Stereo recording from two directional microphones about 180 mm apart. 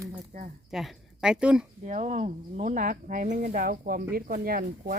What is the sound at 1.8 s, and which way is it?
Speech, 40° right (ahead or behind).